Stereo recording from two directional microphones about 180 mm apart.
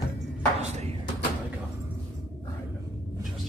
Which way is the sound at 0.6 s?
40° right (ahead or behind).